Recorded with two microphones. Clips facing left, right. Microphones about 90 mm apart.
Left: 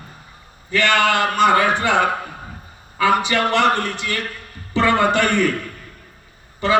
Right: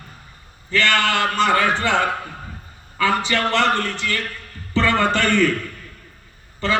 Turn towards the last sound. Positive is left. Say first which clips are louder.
# left 4 dB
turn(degrees=15)  # may be behind; listen again after turning